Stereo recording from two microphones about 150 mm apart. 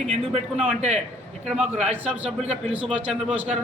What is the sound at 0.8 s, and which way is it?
Speech, 45° right (ahead or behind).